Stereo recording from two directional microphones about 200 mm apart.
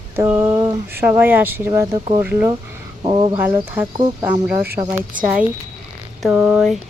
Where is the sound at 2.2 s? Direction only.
10° right (ahead or behind).